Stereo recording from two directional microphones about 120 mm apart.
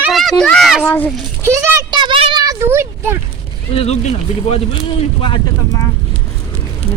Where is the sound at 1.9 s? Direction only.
40° right (ahead or behind); by 3.1 s 20° right (ahead or behind).